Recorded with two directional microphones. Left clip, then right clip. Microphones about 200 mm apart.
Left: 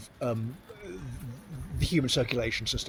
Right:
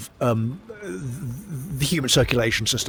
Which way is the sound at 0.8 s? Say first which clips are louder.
Right 9 dB; 55° right (ahead or behind).